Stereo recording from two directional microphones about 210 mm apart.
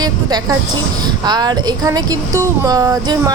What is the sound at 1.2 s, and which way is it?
Speech, 20° right (ahead or behind).